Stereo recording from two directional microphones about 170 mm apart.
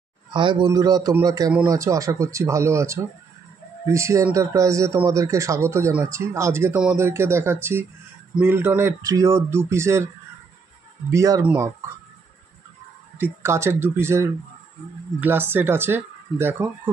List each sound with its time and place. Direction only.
0.3 s a man's voice: 25° right (ahead or behind)
11.1 s a man's voice: 20° right (ahead or behind)
13.2 s speech: 15° right (ahead or behind)